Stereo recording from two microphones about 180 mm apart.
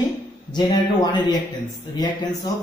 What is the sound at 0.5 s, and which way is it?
Speech, 25° left (ahead or behind).